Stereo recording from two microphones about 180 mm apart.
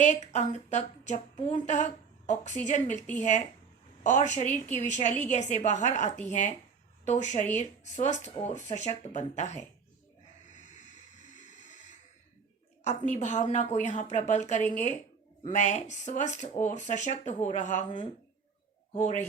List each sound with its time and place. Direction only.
0.0 s a woman's voice: 40° left (ahead or behind)
10.9 s a sound: 40° left (ahead or behind)
12.8 s a woman's voice: 40° left (ahead or behind)